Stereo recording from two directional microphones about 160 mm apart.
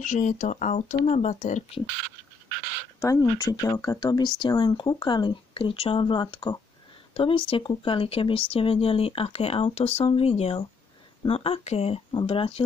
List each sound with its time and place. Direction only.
0.0 s speech: 50° left (ahead or behind)
3.0 s speech: 20° left (ahead or behind); by 12.6 s 35° left (ahead or behind)